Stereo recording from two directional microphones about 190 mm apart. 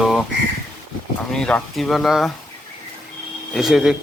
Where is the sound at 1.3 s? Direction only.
5° left (ahead or behind).